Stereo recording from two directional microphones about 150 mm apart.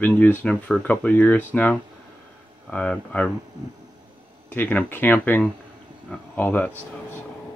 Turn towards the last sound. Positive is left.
turn(degrees=10)  # may be behind; listen again after turning